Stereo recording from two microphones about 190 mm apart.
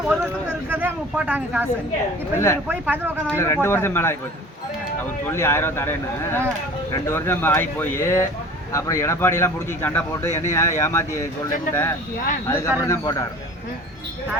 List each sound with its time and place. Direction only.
0.1 s speech: 10° right (ahead or behind)
2.3 s speech: 15° left (ahead or behind)
2.6 s speech: 10° right (ahead or behind)
3.2 s speech: 15° left (ahead or behind)
5.3 s speech: 15° left (ahead or behind)